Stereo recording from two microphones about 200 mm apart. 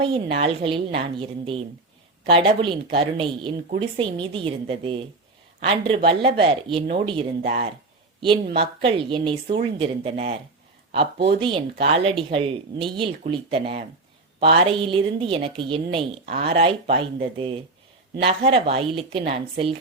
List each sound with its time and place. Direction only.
0.0 s a woman's voice: 25° right (ahead or behind)